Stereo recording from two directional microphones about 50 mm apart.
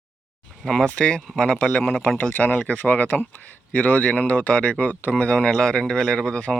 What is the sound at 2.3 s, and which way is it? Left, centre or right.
Speech, left.